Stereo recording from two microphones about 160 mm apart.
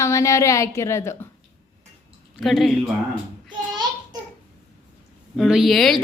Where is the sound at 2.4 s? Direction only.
Centre (ahead or behind).